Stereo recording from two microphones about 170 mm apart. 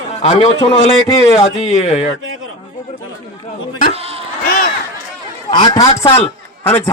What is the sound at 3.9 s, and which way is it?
Bleat, 35° right (ahead or behind).